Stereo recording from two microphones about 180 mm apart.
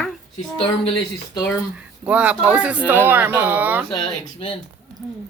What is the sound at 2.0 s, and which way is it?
Speech, 10° right (ahead or behind).